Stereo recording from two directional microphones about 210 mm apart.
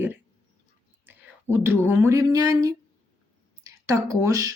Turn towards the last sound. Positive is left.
turn(degrees=-15)  # may be behind; listen again after turning